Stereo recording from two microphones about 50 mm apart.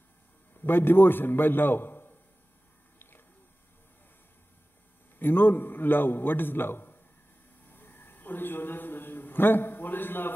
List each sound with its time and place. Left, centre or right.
0.7 s a man's voice: left
5.2 s a man's voice: left
7.7 s a sound: left